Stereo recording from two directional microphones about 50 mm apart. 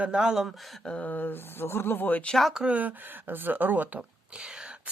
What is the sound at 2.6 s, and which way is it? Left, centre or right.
Speech, right.